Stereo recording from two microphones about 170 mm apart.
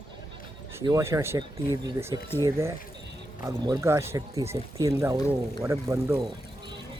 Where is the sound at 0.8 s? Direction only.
15° right (ahead or behind).